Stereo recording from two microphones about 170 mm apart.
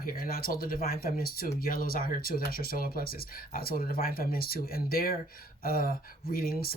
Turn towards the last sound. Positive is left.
turn(degrees=60)  # may be behind; listen again after turning